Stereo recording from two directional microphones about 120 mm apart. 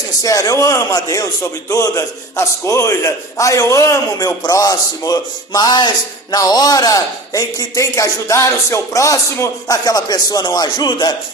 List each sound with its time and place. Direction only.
0.2 s a man's voice: 30° left (ahead or behind)